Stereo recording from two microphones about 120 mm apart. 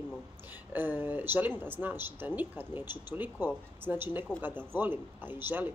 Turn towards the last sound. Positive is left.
turn(degrees=-15)  # may be behind; listen again after turning